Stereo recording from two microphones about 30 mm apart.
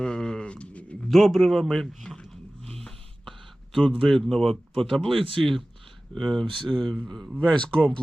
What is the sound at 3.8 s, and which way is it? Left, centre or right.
Speech, centre.